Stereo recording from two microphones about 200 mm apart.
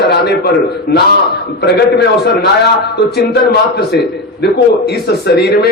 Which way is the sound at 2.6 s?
55° left (ahead or behind).